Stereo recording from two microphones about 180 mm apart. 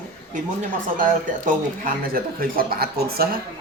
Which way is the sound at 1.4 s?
50° right (ahead or behind).